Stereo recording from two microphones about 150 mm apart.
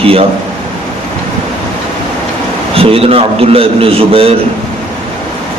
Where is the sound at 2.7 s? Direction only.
40° right (ahead or behind).